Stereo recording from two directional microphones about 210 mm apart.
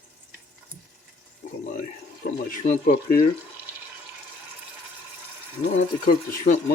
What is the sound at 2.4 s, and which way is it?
Speech, 40° left (ahead or behind).